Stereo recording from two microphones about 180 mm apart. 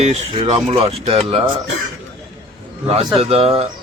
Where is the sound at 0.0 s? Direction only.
35° right (ahead or behind).